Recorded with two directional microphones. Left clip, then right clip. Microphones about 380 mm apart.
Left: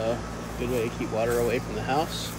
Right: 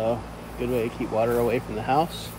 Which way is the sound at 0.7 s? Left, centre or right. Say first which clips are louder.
Right 3 dB; centre.